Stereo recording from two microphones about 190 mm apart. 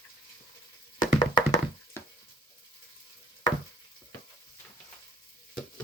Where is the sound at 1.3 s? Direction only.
20° left (ahead or behind).